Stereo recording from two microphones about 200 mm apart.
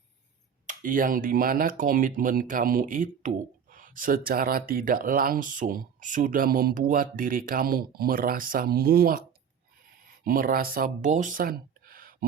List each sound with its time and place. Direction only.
0.7 s speech: 40° right (ahead or behind)
10.2 s speech: 45° right (ahead or behind)